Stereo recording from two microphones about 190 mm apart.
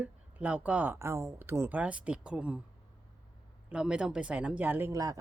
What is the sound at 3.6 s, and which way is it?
Speech, 5° right (ahead or behind).